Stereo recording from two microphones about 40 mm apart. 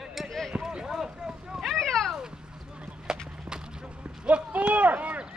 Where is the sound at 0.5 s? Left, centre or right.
Centre.